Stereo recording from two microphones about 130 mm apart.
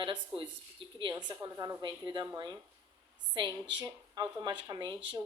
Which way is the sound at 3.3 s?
35° right (ahead or behind).